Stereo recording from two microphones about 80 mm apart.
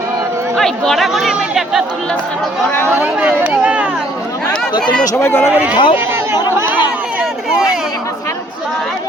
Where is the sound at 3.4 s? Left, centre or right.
Centre.